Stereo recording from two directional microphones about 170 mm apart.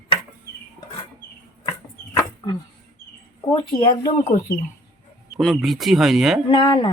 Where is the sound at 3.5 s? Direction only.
25° left (ahead or behind).